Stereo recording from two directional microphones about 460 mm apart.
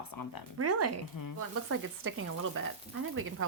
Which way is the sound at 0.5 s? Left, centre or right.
Right.